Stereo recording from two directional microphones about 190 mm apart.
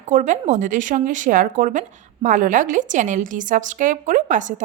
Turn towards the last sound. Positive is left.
turn(degrees=-40)  # may be behind; listen again after turning